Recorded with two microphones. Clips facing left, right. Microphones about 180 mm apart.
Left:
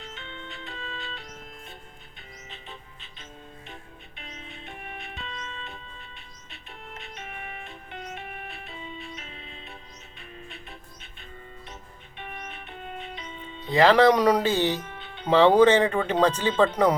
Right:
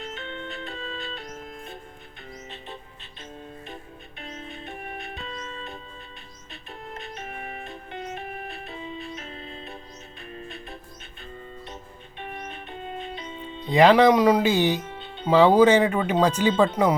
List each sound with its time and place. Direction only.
0.0 s music: 45° right (ahead or behind)
4.2 s music: 45° right (ahead or behind)
7.2 s music: 40° right (ahead or behind)
12.2 s music: 35° right (ahead or behind)
13.7 s speech: 15° right (ahead or behind)
14.8 s music: 25° right (ahead or behind)
15.3 s speech: 10° right (ahead or behind)